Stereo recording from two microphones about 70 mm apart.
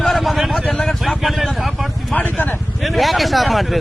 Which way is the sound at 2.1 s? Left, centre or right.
Left.